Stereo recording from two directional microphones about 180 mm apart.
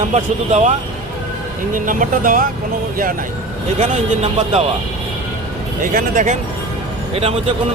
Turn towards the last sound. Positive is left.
turn(degrees=-35)  # may be behind; listen again after turning